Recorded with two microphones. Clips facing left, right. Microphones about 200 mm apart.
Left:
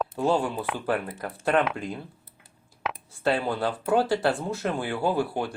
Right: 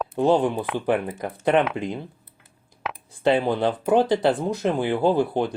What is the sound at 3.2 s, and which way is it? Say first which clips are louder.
Speech: right 5 dB; 20° right (ahead or behind).